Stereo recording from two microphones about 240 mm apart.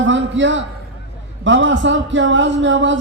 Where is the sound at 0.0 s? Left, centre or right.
Right.